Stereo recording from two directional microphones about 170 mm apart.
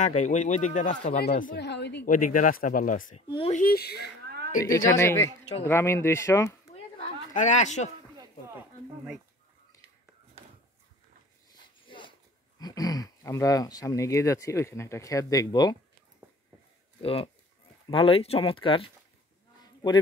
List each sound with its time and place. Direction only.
0.0 s speech: 45° left (ahead or behind)
1.1 s speech: 65° left (ahead or behind)
1.6 s speech: 90° left
2.0 s speech: 50° left (ahead or behind)
3.3 s speech: 40° left (ahead or behind)
3.6 s speech: 65° left (ahead or behind)
4.6 s speech: 20° left (ahead or behind)
6.7 s a sound: 40° left (ahead or behind)
8.5 s speech: 5° right (ahead or behind)
12.5 s speech: 20° left (ahead or behind)
17.0 s speech: 35° left (ahead or behind)